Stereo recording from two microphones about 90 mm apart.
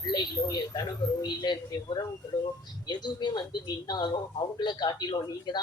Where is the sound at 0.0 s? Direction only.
50° left (ahead or behind).